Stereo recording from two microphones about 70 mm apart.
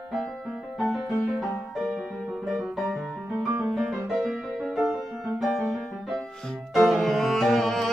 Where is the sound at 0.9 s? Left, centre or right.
Centre.